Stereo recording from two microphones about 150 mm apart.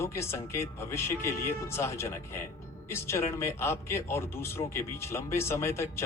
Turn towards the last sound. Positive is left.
turn(degrees=15)  # may be behind; listen again after turning